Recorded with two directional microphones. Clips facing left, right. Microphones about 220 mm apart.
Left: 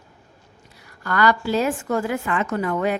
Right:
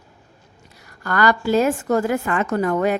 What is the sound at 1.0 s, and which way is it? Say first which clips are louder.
A woman's voice: right 1 dB; 45° right (ahead or behind).